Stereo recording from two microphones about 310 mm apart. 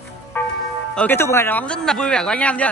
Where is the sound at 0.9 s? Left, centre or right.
Centre.